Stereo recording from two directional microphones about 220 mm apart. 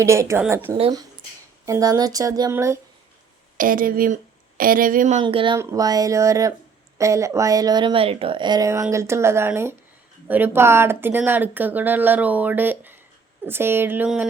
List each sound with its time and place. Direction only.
0.0 s a woman's voice: 15° right (ahead or behind)
3.6 s speech: 40° right (ahead or behind)
5.2 s a woman's voice: 25° right (ahead or behind); by 14.3 s 5° right (ahead or behind)